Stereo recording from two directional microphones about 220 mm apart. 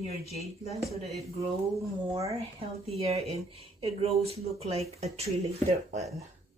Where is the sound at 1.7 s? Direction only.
15° right (ahead or behind).